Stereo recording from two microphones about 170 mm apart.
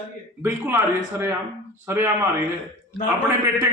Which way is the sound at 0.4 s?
10° right (ahead or behind).